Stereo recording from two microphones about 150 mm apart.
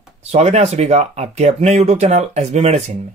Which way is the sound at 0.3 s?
45° right (ahead or behind).